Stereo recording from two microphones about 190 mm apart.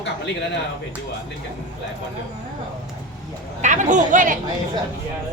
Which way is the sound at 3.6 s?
40° right (ahead or behind).